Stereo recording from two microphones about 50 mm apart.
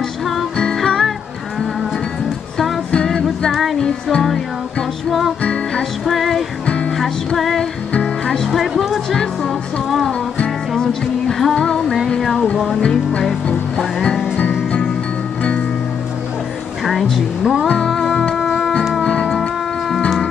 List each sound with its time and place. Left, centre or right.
0.7 s music: centre
2.9 s music: centre
6.0 s music: centre
8.5 s speech: centre
9.4 s music: centre
12.8 s music: centre
16.8 s speech: centre
18.3 s music: centre